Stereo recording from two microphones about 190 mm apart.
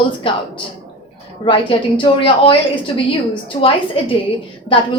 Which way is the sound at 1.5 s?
25° left (ahead or behind).